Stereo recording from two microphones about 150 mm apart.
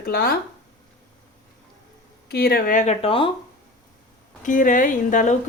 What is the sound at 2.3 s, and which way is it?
Speech, 90° left.